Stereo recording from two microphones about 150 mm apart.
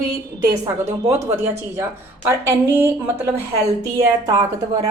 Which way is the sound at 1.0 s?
20° right (ahead or behind).